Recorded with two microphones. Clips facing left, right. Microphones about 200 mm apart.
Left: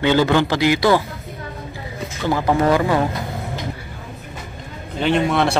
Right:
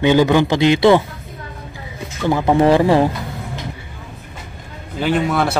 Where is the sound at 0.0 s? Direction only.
15° right (ahead or behind).